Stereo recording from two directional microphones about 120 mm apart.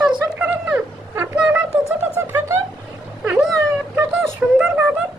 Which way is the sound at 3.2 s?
10° right (ahead or behind).